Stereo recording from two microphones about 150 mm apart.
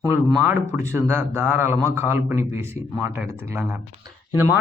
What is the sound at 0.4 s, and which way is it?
A man's voice, 15° right (ahead or behind).